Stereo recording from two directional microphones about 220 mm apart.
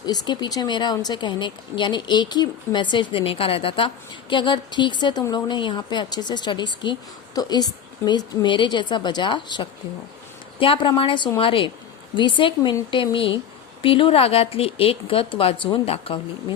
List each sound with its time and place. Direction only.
0.0 s speech: 20° left (ahead or behind)